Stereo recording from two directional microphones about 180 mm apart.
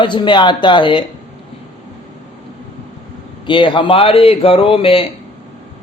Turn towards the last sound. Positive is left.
turn(degrees=30)  # may be behind; listen again after turning